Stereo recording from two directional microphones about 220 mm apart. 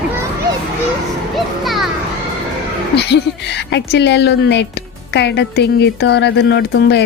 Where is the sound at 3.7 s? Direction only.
50° left (ahead or behind).